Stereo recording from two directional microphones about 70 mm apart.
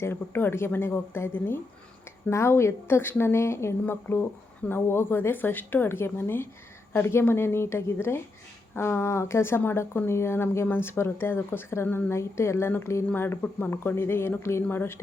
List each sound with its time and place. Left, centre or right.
0.0 s a woman's voice: left